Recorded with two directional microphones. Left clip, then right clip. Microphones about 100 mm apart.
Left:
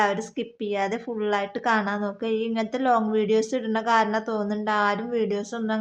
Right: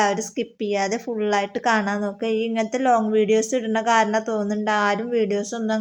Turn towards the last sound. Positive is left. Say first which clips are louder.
# right 4 dB
turn(degrees=-25)  # may be behind; listen again after turning